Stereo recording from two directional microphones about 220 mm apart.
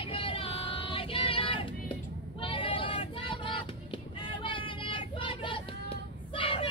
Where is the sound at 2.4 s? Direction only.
25° left (ahead or behind).